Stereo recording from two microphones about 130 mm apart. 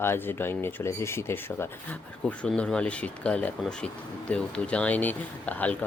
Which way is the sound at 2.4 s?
5° left (ahead or behind).